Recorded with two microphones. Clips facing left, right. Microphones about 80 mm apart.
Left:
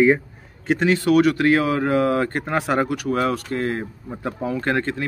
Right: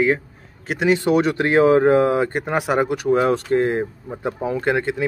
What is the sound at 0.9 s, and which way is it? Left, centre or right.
Speech, right.